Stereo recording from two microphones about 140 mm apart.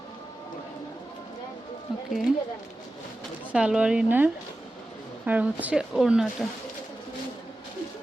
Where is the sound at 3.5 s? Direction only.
5° right (ahead or behind).